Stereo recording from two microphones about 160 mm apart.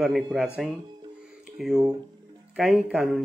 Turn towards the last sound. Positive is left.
turn(degrees=0)  # may be behind; listen again after turning